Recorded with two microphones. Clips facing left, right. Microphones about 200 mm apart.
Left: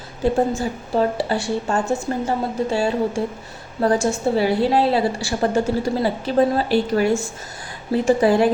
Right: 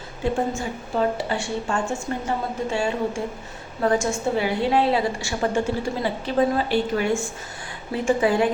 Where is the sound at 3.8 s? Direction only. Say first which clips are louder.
Left 3 dB; 35° left (ahead or behind).